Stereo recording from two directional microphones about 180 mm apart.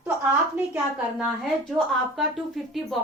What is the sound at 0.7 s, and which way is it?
A woman's voice, centre (ahead or behind).